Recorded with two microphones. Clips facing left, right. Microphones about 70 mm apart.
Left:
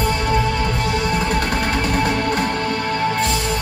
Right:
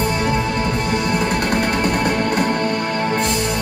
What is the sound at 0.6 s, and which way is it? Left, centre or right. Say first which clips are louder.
Music: right 1 dB; right.